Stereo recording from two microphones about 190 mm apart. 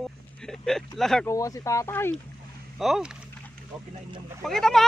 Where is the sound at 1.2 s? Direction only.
15° left (ahead or behind).